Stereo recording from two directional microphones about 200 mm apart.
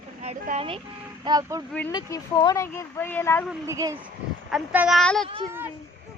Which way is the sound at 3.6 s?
15° right (ahead or behind).